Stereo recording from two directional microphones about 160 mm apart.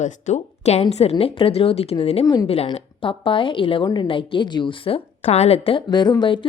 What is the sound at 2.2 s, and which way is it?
Speech, 25° left (ahead or behind).